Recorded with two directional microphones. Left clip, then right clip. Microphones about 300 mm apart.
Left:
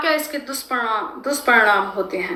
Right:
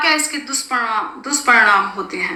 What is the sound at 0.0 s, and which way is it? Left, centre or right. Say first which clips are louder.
A woman's voice: right 4 dB; centre.